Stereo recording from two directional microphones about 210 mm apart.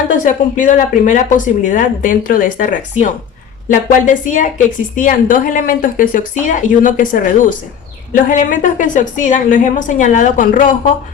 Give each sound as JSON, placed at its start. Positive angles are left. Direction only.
{"t": 0.1, "sound": "a woman's voice", "side_deg": 35}